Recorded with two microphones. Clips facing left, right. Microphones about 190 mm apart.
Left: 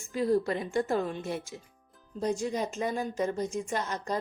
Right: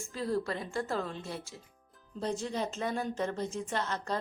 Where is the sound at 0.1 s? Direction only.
20° left (ahead or behind).